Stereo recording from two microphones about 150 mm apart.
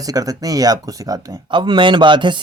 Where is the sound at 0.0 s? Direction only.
25° right (ahead or behind).